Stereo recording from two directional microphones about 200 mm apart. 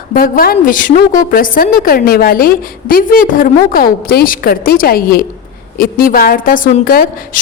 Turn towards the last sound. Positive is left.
turn(degrees=45)  # may be behind; listen again after turning